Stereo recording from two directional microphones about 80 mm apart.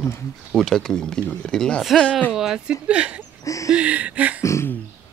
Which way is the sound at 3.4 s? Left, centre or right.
Left.